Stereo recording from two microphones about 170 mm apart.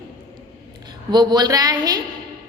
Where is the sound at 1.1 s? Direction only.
25° right (ahead or behind).